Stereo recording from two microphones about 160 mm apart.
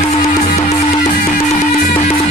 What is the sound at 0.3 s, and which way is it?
Music, 45° left (ahead or behind).